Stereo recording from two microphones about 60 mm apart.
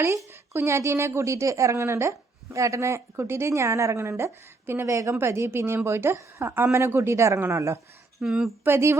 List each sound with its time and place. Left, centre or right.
0.0 s a woman's voice: right
8.2 s speech: centre
8.6 s a woman's voice: right